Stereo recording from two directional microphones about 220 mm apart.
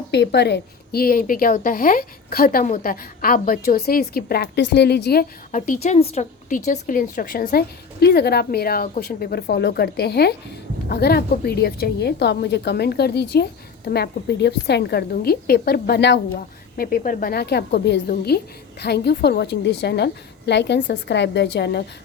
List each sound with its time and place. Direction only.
0.1 s a woman's voice: 50° left (ahead or behind)
5.5 s a woman's voice: 35° left (ahead or behind)